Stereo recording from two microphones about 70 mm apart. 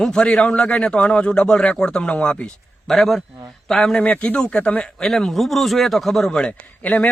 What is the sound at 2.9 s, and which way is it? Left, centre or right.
A man's voice, centre.